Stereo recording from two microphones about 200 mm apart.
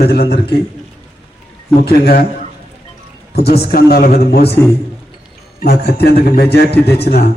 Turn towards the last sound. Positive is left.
turn(degrees=55)  # may be behind; listen again after turning